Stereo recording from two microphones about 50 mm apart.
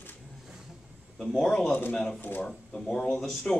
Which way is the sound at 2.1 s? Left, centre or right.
Left.